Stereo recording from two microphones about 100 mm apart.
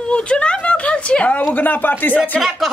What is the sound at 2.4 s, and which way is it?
Speech, centre (ahead or behind).